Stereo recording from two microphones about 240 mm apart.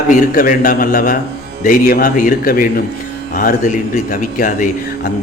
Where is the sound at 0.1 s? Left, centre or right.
Left.